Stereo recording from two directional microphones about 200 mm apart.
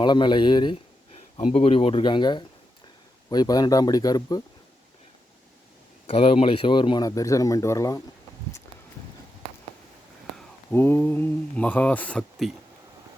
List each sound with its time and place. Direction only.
0.0 s a man's voice: 20° left (ahead or behind)
6.1 s speech: 30° left (ahead or behind)
10.7 s speech: 10° left (ahead or behind)